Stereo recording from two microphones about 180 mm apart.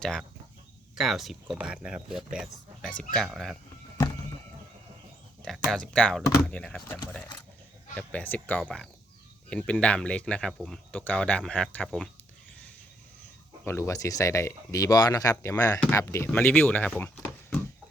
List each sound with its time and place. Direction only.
0.0 s speech: 5° left (ahead or behind)
5.4 s speech: 5° left (ahead or behind)
13.7 s speech: 15° left (ahead or behind)